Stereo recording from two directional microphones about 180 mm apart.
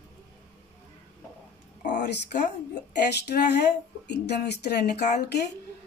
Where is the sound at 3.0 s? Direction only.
65° left (ahead or behind).